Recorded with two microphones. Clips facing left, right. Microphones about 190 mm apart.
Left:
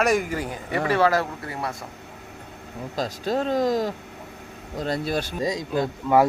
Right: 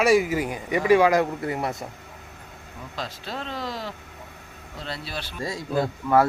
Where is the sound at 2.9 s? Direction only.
40° left (ahead or behind).